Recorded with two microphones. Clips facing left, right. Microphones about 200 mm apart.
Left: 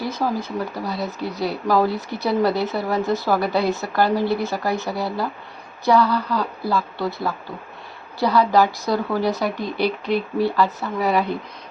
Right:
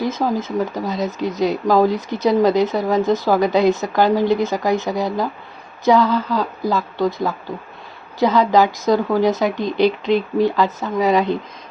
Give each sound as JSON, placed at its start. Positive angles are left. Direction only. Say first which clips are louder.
{"t": 0.0, "sound": "a woman's voice", "louder": "right 4 dB", "side_deg": -20}